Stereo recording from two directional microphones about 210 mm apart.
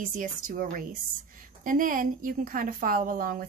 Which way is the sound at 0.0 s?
40° right (ahead or behind).